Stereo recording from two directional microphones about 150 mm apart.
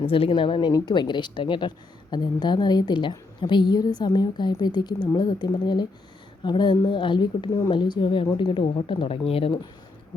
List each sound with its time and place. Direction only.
0.0 s a woman's voice: 35° left (ahead or behind)